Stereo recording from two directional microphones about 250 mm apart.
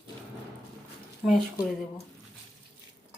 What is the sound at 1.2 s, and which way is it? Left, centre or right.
Speech, centre.